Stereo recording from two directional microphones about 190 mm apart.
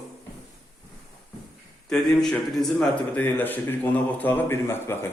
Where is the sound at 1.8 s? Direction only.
5° left (ahead or behind).